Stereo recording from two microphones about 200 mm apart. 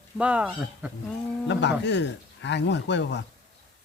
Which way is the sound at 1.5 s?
60° left (ahead or behind).